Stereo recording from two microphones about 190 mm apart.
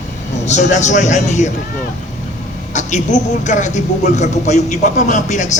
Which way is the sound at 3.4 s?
40° left (ahead or behind).